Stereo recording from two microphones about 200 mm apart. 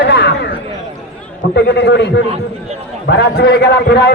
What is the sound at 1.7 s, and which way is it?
Speech, 60° left (ahead or behind).